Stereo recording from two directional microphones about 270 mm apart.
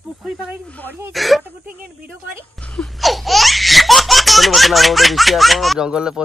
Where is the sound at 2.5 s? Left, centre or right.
Centre.